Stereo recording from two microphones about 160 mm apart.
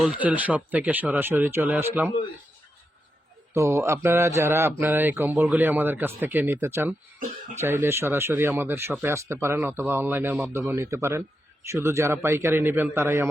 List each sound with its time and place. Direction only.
0.0 s speech: 5° right (ahead or behind)
3.5 s speech: 20° right (ahead or behind)